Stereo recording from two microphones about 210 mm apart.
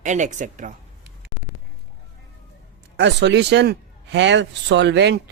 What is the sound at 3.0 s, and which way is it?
A man's voice, 55° right (ahead or behind).